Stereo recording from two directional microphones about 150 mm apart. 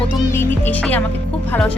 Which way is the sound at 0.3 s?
15° left (ahead or behind).